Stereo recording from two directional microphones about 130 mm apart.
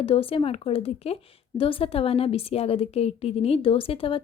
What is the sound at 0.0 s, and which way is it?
Speech, 45° left (ahead or behind).